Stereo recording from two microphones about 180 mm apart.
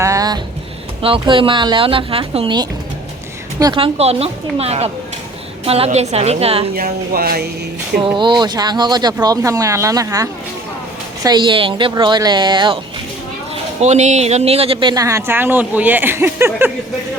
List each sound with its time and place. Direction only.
0.0 s a sound: 20° right (ahead or behind)
1.0 s a woman's voice: 30° right (ahead or behind)
6.7 s speech: 55° right (ahead or behind)
8.0 s speech: 25° right (ahead or behind)
13.8 s speech: 40° right (ahead or behind); by 16.7 s 10° right (ahead or behind)